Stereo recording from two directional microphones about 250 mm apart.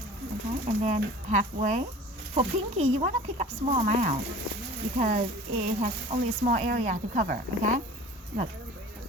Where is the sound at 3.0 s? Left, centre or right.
Right.